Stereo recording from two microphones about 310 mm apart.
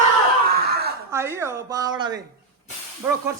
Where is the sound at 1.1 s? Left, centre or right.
Centre.